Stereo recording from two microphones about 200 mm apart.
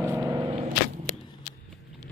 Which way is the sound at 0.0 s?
15° right (ahead or behind).